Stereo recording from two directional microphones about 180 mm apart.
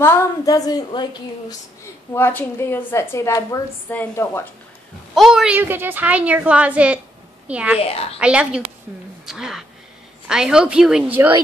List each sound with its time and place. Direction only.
0.0 s a woman's voice: 15° left (ahead or behind)
2.1 s a woman's voice: 15° left (ahead or behind)
5.1 s a woman's voice: centre (ahead or behind)
7.8 s a woman's voice: 35° left (ahead or behind)
8.2 s a woman's voice: 5° right (ahead or behind)